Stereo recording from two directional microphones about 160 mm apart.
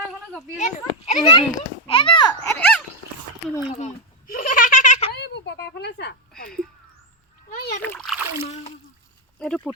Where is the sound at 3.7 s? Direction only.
55° left (ahead or behind).